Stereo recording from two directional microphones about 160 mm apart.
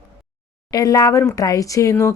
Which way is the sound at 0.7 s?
25° left (ahead or behind).